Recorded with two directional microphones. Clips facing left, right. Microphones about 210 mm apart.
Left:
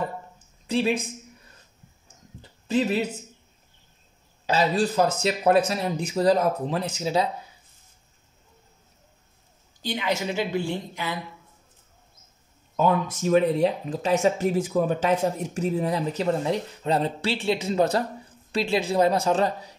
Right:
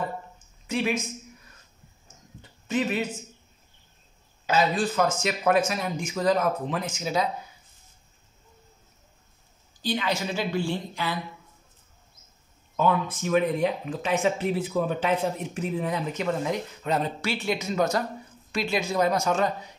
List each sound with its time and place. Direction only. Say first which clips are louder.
0.7 s speech: left 3 dB; 30° left (ahead or behind)
2.7 s speech: left 3 dB; 35° left (ahead or behind)
4.5 s speech: left 1 dB; 35° left (ahead or behind)
9.8 s a woman's voice: even; 20° left (ahead or behind)
12.7 s speech: left 2 dB; 40° left (ahead or behind)